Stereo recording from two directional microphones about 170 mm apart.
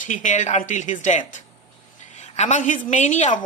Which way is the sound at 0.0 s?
50° left (ahead or behind).